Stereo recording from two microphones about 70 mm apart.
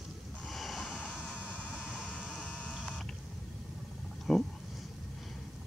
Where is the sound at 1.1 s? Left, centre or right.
Centre.